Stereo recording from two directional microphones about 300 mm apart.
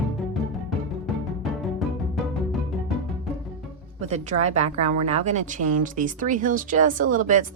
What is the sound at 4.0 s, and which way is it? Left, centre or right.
A woman's voice, right.